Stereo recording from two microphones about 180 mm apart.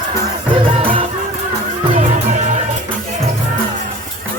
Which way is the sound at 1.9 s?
40° right (ahead or behind).